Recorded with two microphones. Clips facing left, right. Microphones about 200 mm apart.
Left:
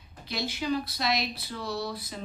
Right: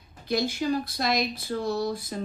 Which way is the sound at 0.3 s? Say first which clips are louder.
Right 5 dB; 50° right (ahead or behind).